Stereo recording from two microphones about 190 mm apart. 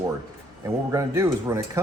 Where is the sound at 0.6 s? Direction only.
15° right (ahead or behind).